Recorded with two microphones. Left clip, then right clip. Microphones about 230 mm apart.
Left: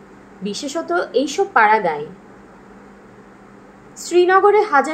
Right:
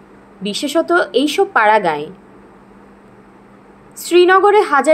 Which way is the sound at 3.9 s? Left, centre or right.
Right.